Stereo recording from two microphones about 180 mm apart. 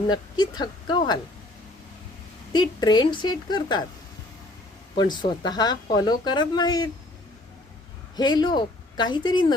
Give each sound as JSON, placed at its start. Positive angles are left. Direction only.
{"t": 0.1, "sound": "speech", "side_deg": 25}
{"t": 2.5, "sound": "speech", "side_deg": 25}
{"t": 4.9, "sound": "speech", "side_deg": 25}
{"t": 8.1, "sound": "a woman's voice", "side_deg": 20}